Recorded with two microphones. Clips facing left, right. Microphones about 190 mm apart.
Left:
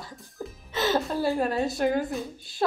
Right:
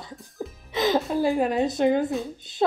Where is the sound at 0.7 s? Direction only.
15° right (ahead or behind).